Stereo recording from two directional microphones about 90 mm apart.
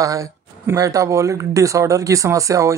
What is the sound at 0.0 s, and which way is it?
Speech, 40° right (ahead or behind).